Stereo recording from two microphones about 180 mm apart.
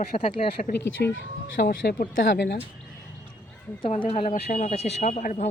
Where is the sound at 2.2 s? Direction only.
75° left (ahead or behind).